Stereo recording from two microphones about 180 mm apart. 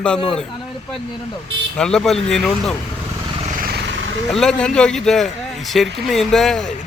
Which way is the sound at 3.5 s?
60° right (ahead or behind).